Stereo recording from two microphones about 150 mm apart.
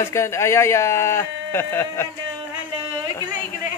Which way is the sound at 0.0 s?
20° left (ahead or behind).